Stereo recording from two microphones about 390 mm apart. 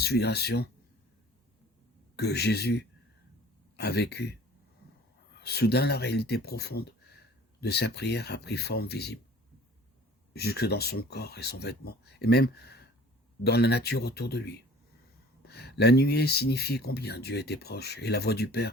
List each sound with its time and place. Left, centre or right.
0.0 s speech: left
2.1 s speech: left
5.4 s speech: left
10.3 s speech: left